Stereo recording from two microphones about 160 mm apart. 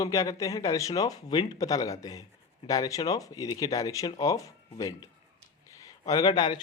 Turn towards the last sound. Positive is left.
turn(degrees=30)  # may be behind; listen again after turning